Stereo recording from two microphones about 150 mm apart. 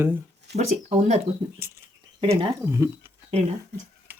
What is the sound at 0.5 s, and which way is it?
Speech, 50° right (ahead or behind).